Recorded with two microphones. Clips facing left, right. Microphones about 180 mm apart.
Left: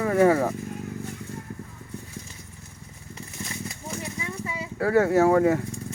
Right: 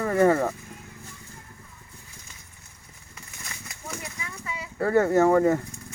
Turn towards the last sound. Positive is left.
turn(degrees=5)  # may be behind; listen again after turning